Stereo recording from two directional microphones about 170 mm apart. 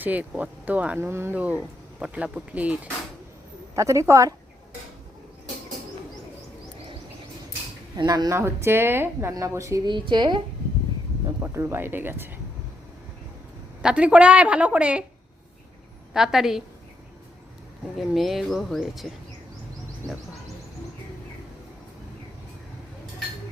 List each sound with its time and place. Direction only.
0.0 s speech: 10° right (ahead or behind)
7.9 s a woman's voice: 25° right (ahead or behind)
11.3 s speech: 15° right (ahead or behind)
13.8 s speech: 5° right (ahead or behind)
16.1 s speech: centre (ahead or behind)
17.9 s speech: centre (ahead or behind)